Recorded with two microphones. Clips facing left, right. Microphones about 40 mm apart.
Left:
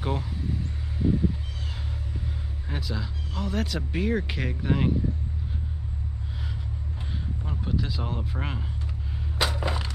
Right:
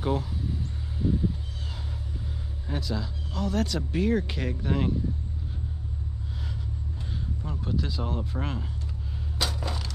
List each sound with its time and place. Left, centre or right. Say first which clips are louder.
0.0 s speech: right 2 dB; centre
2.7 s speech: right 2 dB; centre
7.4 s speech: left 1 dB; centre
9.4 s a sound: left 4 dB; left